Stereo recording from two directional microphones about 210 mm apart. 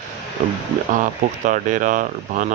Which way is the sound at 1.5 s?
40° right (ahead or behind).